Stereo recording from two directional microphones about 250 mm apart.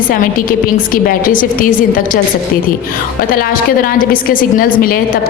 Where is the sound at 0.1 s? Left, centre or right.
Left.